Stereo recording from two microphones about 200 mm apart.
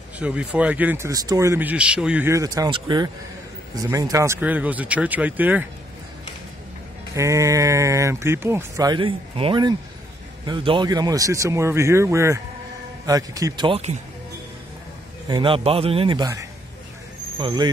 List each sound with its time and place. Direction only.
0.2 s speech: 5° right (ahead or behind)
7.2 s a man's voice: 15° right (ahead or behind)
15.2 s a man's voice: 25° right (ahead or behind)